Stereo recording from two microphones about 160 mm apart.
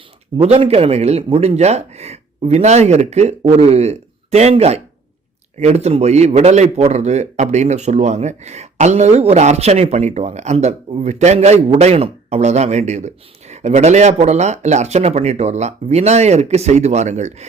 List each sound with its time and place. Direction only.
0.3 s a man's voice: 35° right (ahead or behind)